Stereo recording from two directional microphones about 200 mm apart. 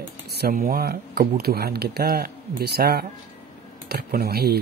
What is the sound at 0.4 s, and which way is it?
Speech, 45° right (ahead or behind).